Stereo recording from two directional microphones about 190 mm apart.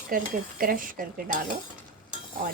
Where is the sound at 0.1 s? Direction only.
50° right (ahead or behind).